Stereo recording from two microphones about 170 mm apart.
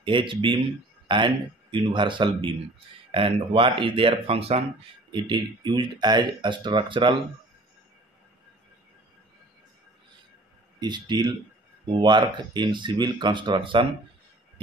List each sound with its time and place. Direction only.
0.0 s speech: 30° right (ahead or behind)
10.8 s speech: 25° right (ahead or behind)